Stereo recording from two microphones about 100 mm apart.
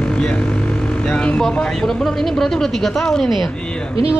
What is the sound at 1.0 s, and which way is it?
Speech, 10° left (ahead or behind).